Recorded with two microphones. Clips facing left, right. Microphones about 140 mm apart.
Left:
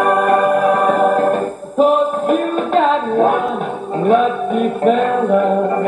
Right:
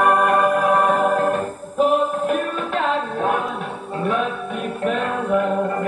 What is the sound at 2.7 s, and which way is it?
Music, 35° left (ahead or behind).